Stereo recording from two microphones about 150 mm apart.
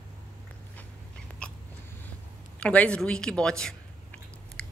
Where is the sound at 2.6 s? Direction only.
10° left (ahead or behind).